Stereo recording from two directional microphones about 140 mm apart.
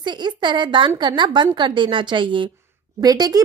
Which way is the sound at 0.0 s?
35° right (ahead or behind).